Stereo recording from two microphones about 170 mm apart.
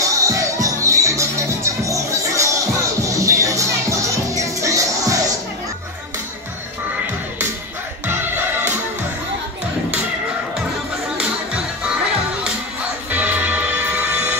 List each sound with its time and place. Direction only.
0.0 s music: 20° right (ahead or behind)
8.1 s music: 10° right (ahead or behind)
11.1 s music: 5° right (ahead or behind)
13.1 s music: 10° right (ahead or behind)